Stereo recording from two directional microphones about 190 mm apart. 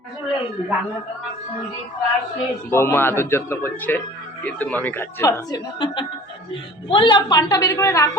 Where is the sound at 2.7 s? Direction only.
15° left (ahead or behind).